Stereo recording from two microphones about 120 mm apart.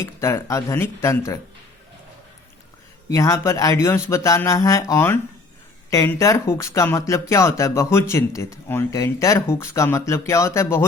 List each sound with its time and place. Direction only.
0.0 s speech: 20° left (ahead or behind)
3.1 s speech: 25° left (ahead or behind)